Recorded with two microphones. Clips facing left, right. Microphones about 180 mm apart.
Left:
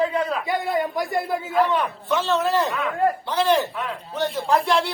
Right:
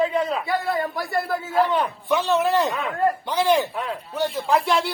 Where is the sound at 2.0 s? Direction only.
15° right (ahead or behind).